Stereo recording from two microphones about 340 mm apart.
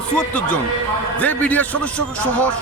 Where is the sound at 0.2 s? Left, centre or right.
Centre.